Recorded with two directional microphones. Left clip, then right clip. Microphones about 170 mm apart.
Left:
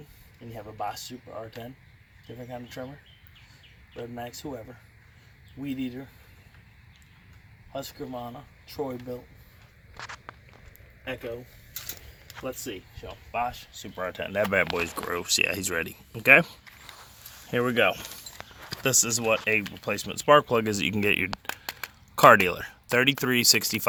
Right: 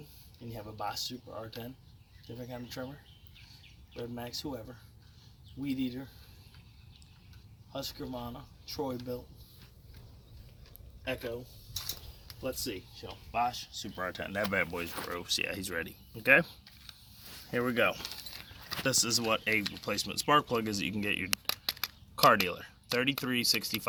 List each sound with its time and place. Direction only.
0.5 s speech: 15° left (ahead or behind)
3.9 s speech: 20° left (ahead or behind)
7.7 s speech: 20° left (ahead or behind)
11.0 s speech: 10° left (ahead or behind)
12.5 s speech: 20° left (ahead or behind)
13.8 s speech: 40° left (ahead or behind); by 16.6 s 70° left (ahead or behind)
17.5 s speech: 55° left (ahead or behind)
19.8 s speech: 60° left (ahead or behind); by 21.2 s 90° left
21.4 s a sound: 10° left (ahead or behind)
22.1 s speech: 90° left